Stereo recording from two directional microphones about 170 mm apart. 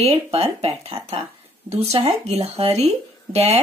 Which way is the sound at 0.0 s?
35° right (ahead or behind).